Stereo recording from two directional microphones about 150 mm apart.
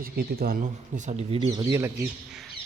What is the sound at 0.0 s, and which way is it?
Speech, 85° right.